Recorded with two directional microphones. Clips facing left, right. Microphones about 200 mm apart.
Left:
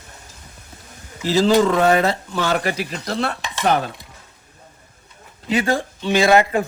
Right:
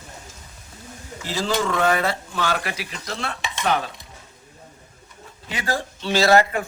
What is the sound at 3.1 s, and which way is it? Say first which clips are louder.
Stir: left 5 dB; 40° left (ahead or behind).